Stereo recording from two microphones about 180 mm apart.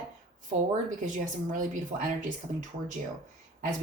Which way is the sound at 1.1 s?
45° right (ahead or behind).